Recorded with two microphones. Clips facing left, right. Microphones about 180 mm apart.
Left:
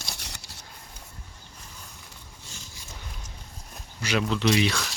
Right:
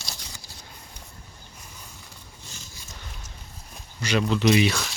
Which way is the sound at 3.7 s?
5° left (ahead or behind).